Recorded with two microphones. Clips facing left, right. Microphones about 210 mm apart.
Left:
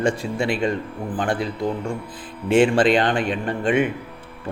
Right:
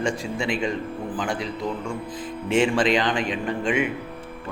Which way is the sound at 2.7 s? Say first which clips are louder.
Left 4 dB; 55° left (ahead or behind).